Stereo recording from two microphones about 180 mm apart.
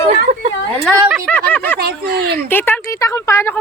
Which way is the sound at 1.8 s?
60° right (ahead or behind).